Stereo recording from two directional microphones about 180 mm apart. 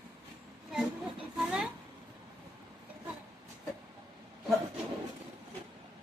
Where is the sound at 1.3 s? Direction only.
5° right (ahead or behind).